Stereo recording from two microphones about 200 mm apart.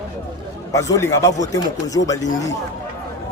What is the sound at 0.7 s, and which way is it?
A man's voice, 15° left (ahead or behind).